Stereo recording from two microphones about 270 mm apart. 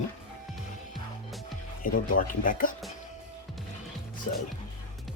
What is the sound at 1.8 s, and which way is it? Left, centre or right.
Speech, left.